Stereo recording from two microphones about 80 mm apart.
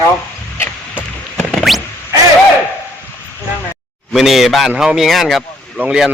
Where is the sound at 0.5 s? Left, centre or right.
Left.